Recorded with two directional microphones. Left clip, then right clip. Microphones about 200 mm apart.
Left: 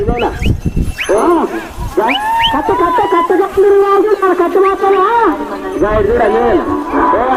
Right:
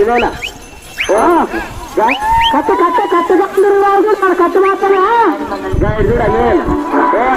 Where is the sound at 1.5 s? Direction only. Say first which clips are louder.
Even; 50° right (ahead or behind).